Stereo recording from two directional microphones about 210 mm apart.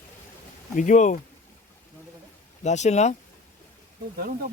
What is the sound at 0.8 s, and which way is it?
Speech, 35° left (ahead or behind).